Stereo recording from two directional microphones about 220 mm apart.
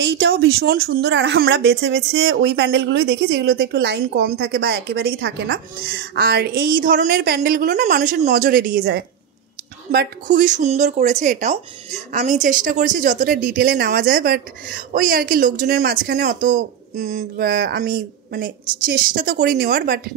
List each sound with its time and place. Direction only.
0.0 s speech: 50° right (ahead or behind)